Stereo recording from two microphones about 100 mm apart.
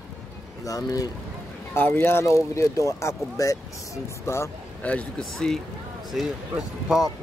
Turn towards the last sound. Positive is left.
turn(degrees=-5)  # may be behind; listen again after turning